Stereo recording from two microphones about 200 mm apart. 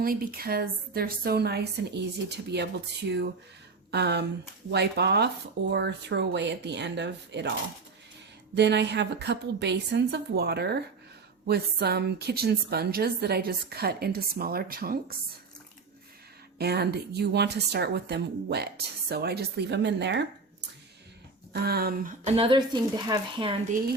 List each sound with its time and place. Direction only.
0.0 s a woman's voice: 45° right (ahead or behind)
3.9 s a woman's voice: 55° right (ahead or behind)
8.5 s a woman's voice: 60° right (ahead or behind)
16.6 s a woman's voice: 55° right (ahead or behind)
21.5 s a woman's voice: 50° right (ahead or behind)
22.4 s speech: 25° right (ahead or behind)